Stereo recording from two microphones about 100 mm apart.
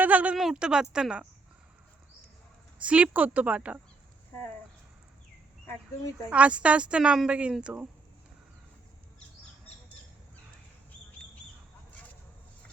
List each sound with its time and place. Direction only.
0.0 s a sound: 15° right (ahead or behind)
0.3 s speech: 5° right (ahead or behind)
2.8 s speech: 15° right (ahead or behind)
6.3 s speech: 10° right (ahead or behind)